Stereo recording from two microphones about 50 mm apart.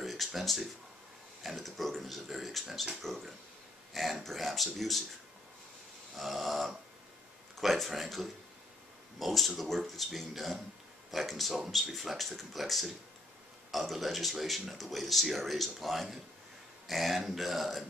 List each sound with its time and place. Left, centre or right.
0.0 s a sound: centre
1.4 s speech: centre
6.1 s speech: centre